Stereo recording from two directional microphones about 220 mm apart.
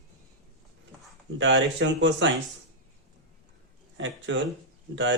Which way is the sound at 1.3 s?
60° right (ahead or behind).